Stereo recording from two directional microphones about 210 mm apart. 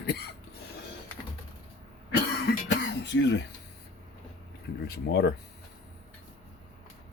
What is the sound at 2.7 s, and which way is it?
Speech, 55° left (ahead or behind).